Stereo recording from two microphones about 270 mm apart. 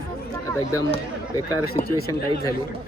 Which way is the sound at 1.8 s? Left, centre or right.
Left.